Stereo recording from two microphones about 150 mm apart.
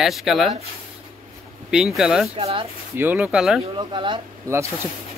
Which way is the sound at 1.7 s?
5° right (ahead or behind).